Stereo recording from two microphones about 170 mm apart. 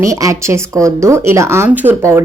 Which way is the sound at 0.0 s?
20° right (ahead or behind).